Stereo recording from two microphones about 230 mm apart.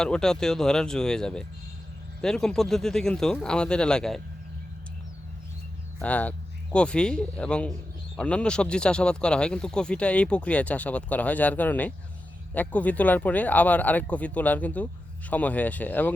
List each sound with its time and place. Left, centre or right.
0.0 s speech: centre
6.0 s speech: centre